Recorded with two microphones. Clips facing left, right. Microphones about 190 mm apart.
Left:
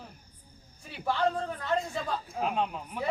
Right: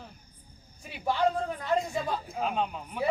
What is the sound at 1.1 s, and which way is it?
A man's voice, 10° right (ahead or behind).